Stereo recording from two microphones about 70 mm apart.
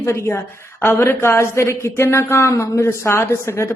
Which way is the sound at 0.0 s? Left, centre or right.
Left.